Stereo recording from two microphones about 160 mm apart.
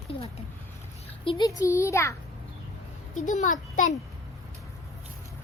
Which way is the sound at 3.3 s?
50° left (ahead or behind).